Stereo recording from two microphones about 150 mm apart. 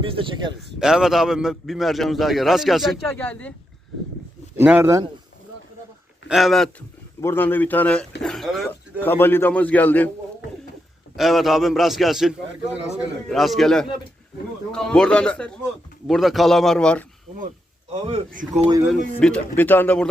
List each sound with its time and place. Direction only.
0.0 s speech: 35° right (ahead or behind)
0.8 s a man's voice: 5° right (ahead or behind)
4.5 s a man's voice: 10° right (ahead or behind)
6.2 s speech: centre (ahead or behind)
7.2 s speech: 15° left (ahead or behind)
9.0 s speech: 15° left (ahead or behind)
11.2 s a man's voice: centre (ahead or behind)
17.9 s a man's voice: 40° right (ahead or behind)
18.3 s speech: 60° right (ahead or behind)
19.2 s speech: 10° left (ahead or behind)